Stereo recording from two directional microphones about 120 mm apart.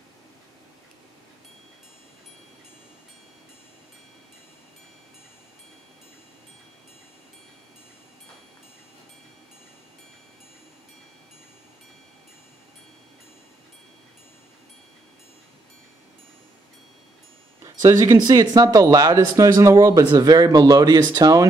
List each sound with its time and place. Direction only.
17.6 s speech: 25° right (ahead or behind)